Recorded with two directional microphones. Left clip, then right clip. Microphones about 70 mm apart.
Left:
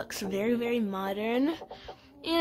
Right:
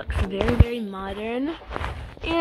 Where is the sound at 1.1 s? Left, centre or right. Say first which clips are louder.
Right 1 dB; left.